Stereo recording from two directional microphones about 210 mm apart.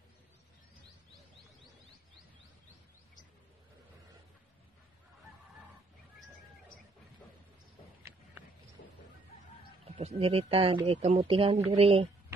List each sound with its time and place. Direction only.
8.8 s chicken: 55° left (ahead or behind)
9.9 s speech: 30° right (ahead or behind)